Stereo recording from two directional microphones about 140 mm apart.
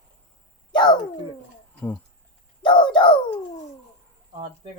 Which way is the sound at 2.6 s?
35° left (ahead or behind).